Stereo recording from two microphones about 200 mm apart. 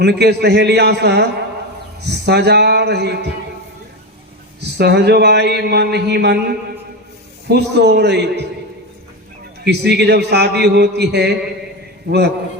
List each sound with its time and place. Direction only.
0.0 s a man's voice: 55° right (ahead or behind)
4.8 s a man's voice: 55° right (ahead or behind)
9.6 s a man's voice: 55° right (ahead or behind)